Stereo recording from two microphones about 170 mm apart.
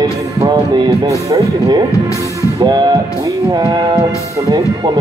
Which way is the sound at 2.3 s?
20° right (ahead or behind).